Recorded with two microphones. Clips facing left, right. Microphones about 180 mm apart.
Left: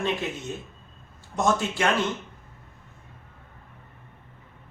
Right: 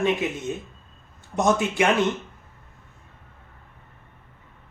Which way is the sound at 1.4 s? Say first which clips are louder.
Right 3 dB; 20° right (ahead or behind).